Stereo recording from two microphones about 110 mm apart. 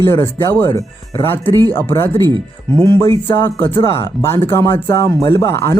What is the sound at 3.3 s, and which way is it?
Speech, 20° left (ahead or behind).